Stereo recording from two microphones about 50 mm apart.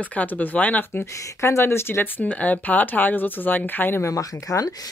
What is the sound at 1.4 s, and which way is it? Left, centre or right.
Speech, left.